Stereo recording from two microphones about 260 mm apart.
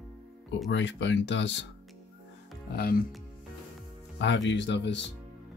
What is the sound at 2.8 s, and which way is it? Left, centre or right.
Speech, left.